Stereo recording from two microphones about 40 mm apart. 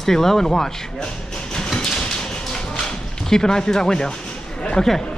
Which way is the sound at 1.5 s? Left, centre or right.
Centre.